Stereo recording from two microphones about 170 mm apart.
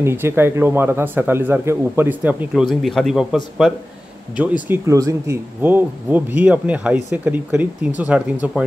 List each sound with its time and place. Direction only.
0.0 s speech: 15° right (ahead or behind); by 3.8 s centre (ahead or behind)
4.6 s speech: 20° right (ahead or behind)